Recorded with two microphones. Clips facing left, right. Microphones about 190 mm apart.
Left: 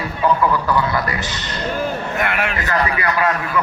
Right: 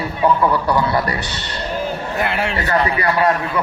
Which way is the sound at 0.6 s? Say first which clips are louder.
Right 2 dB; 35° right (ahead or behind).